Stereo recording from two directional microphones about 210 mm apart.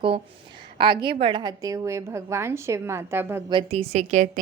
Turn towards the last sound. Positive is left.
turn(degrees=-35)  # may be behind; listen again after turning